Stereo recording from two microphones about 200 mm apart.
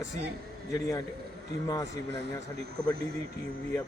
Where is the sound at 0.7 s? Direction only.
15° left (ahead or behind).